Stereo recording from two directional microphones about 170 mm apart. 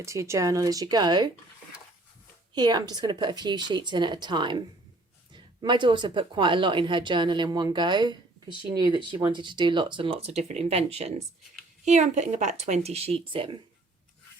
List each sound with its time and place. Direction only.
0.0 s speech: 15° right (ahead or behind)
2.6 s speech: 25° right (ahead or behind)